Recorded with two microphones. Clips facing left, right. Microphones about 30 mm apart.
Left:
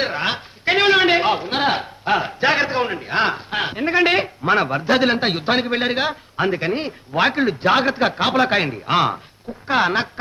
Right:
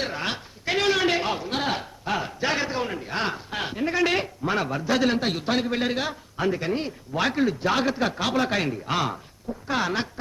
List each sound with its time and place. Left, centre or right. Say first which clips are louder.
0.0 s a man's voice: left 7 dB; left